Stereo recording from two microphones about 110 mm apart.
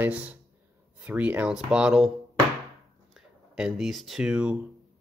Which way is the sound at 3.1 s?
5° right (ahead or behind).